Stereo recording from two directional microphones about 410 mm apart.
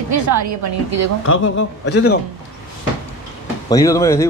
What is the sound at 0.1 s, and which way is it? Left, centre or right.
A woman's voice, right.